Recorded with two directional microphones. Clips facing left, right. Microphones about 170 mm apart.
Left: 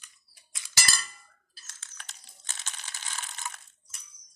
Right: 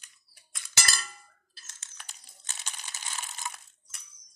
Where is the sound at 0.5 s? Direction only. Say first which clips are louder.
Even; 55° right (ahead or behind).